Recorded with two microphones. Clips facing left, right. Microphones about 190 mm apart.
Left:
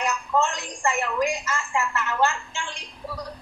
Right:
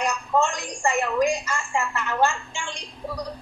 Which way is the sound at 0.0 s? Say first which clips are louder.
Right 1 dB; 15° right (ahead or behind).